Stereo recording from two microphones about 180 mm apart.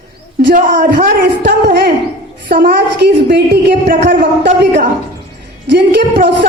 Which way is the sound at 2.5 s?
65° right (ahead or behind).